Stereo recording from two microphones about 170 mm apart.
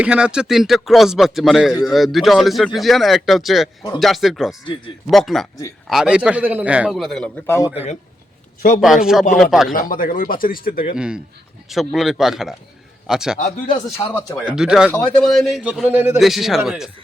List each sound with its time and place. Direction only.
0.0 s speech: 5° right (ahead or behind)
7.4 s speech: 15° left (ahead or behind)
8.8 s speech: centre (ahead or behind)
9.7 s speech: 55° left (ahead or behind)
10.9 s speech: 5° right (ahead or behind)
13.9 s speech: 20° left (ahead or behind)
14.3 s a man's voice: 5° right (ahead or behind)
16.2 s speech: centre (ahead or behind)